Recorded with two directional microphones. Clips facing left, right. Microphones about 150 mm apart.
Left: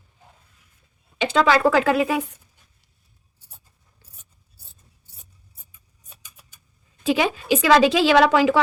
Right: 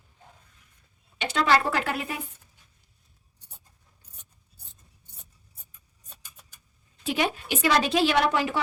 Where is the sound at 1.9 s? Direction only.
90° left.